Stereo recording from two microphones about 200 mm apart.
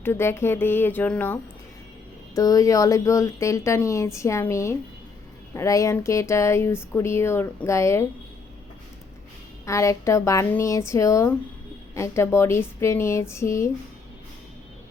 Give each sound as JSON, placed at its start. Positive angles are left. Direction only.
{"t": 0.0, "sound": "speech", "side_deg": 10}
{"t": 2.3, "sound": "speech", "side_deg": 20}
{"t": 9.6, "sound": "speech", "side_deg": 15}